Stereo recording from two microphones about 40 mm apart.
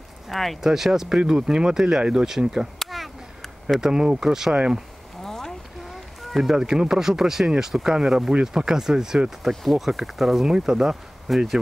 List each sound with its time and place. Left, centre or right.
0.3 s speech: centre
0.6 s speech: centre
2.8 s a sound: centre
3.8 s speech: centre
5.2 s a sound: centre
6.2 s a sound: centre
6.5 s speech: centre
9.4 s speech: centre
10.4 s speech: centre
11.2 s speech: centre